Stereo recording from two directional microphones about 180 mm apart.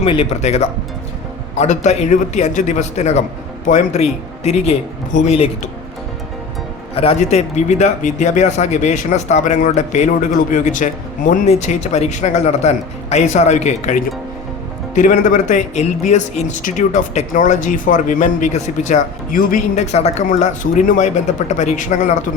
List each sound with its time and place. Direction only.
0.0 s speech: 30° left (ahead or behind)
6.9 s speech: 35° left (ahead or behind)